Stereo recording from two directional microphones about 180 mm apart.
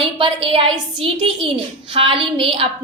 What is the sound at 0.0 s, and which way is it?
A woman's voice, 30° right (ahead or behind).